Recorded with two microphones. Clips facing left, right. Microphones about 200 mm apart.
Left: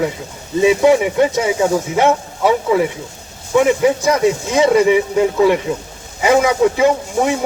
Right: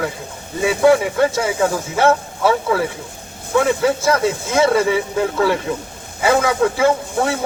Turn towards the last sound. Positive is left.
turn(degrees=15)  # may be behind; listen again after turning